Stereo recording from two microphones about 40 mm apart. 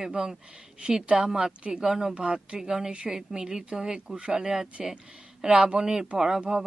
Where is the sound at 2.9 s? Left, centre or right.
Right.